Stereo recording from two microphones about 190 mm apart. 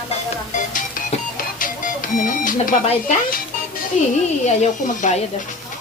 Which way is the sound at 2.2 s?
45° left (ahead or behind).